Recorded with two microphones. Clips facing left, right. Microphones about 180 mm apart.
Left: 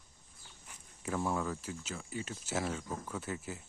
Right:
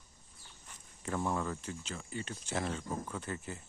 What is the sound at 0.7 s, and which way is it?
Speech, 5° left (ahead or behind).